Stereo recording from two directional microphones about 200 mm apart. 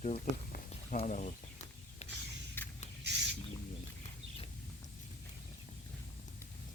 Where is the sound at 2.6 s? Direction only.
10° left (ahead or behind).